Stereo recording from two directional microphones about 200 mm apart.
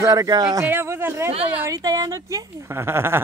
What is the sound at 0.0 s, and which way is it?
Speech, 15° right (ahead or behind).